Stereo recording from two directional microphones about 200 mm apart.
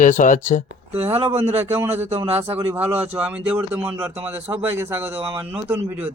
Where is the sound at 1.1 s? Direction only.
15° right (ahead or behind).